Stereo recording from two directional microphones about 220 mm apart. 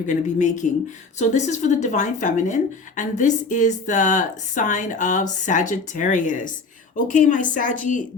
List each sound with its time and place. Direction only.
0.1 s speech: 35° left (ahead or behind)